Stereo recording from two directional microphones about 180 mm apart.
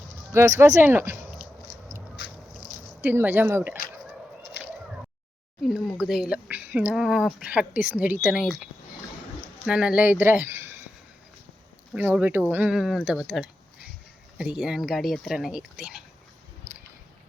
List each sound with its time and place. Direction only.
0.3 s speech: 15° right (ahead or behind)
3.0 s speech: 10° right (ahead or behind)
5.6 s speech: centre (ahead or behind)
11.9 s speech: 10° right (ahead or behind)